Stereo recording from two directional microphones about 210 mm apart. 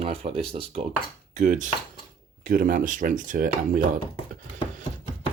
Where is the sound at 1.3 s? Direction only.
40° right (ahead or behind).